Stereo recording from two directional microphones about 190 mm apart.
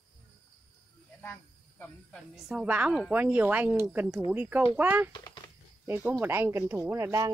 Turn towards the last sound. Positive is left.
turn(degrees=-15)  # may be behind; listen again after turning